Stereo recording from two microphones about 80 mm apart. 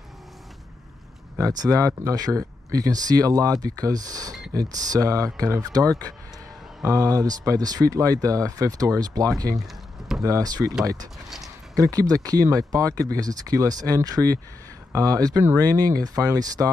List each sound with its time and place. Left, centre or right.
1.4 s speech: right
11.7 s speech: right